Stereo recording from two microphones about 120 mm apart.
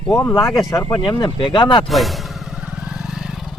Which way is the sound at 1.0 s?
40° left (ahead or behind).